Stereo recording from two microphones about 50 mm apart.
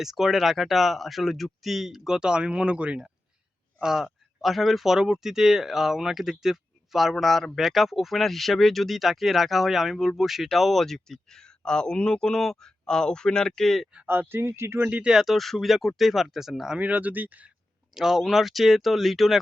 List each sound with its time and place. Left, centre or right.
0.0 s speech: centre; by 3.1 s right
3.8 s speech: centre
4.4 s speech: centre
14.1 s speech: right
14.3 s speech: right
15.0 s speech: centre
16.7 s speech: right
17.9 s speech: centre